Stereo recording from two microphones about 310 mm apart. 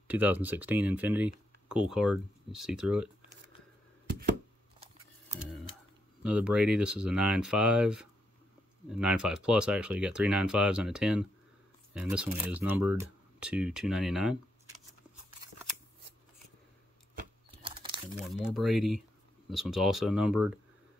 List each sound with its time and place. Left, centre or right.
0.1 s speech: centre
6.2 s speech: centre
17.6 s crumpling: centre
18.2 s speech: centre